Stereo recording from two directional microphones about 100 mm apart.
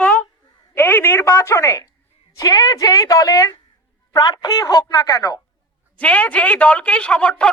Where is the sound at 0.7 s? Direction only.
20° left (ahead or behind); by 5.4 s 40° left (ahead or behind).